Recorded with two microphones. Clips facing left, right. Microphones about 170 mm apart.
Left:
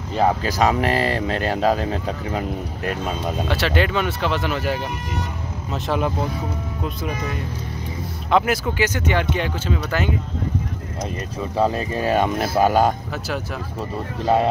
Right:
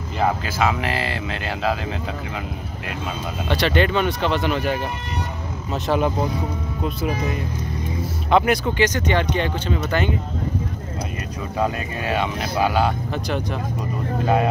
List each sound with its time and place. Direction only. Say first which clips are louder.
0.2 s speech: left 2 dB; 40° left (ahead or behind)
3.4 s speech: right 3 dB; 5° left (ahead or behind)
11.5 s speech: left 3 dB; 30° left (ahead or behind)
14.2 s speech: left 2 dB; 30° left (ahead or behind)